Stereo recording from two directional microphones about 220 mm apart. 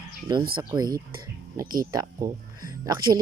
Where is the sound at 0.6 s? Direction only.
20° right (ahead or behind).